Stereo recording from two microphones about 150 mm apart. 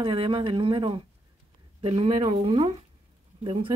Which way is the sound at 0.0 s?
35° right (ahead or behind).